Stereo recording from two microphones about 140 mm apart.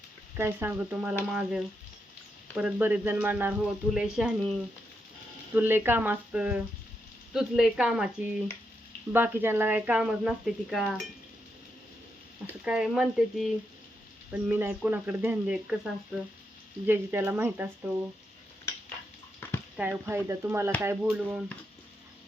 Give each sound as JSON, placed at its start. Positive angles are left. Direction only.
{"t": 0.3, "sound": "speech", "side_deg": -15}
{"t": 5.5, "sound": "speech", "side_deg": -15}
{"t": 12.6, "sound": "speech", "side_deg": -5}
{"t": 19.7, "sound": "speech", "side_deg": -5}
{"t": 20.1, "sound": "speech", "side_deg": -20}